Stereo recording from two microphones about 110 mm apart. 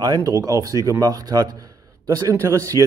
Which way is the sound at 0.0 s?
35° right (ahead or behind).